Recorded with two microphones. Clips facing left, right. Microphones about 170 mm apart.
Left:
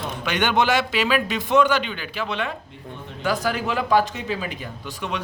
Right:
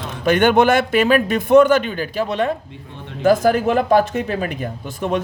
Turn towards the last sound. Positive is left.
turn(degrees=-50)  # may be behind; listen again after turning